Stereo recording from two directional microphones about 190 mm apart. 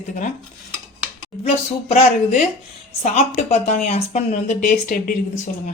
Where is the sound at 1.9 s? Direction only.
35° left (ahead or behind).